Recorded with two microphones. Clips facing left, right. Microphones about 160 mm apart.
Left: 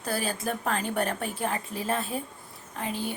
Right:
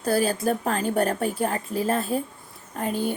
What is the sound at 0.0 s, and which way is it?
A woman's voice, 40° right (ahead or behind).